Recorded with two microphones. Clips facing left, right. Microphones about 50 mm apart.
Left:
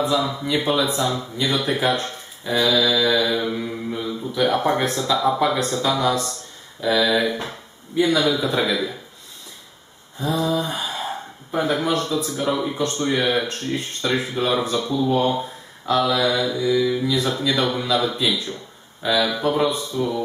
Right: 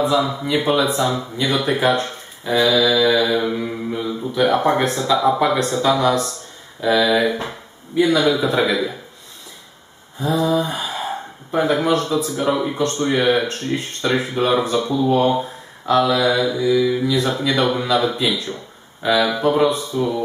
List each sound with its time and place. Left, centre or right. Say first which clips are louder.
0.0 s speech: right 3 dB; centre
10.1 s speech: right 4 dB; centre
12.4 s speech: right 3 dB; centre
12.7 s speech: right 3 dB; centre